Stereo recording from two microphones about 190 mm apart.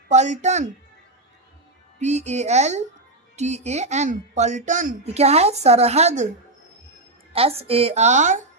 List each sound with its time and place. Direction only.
0.1 s speech: 40° right (ahead or behind)
2.0 s speech: 35° right (ahead or behind)
7.3 s speech: 30° right (ahead or behind)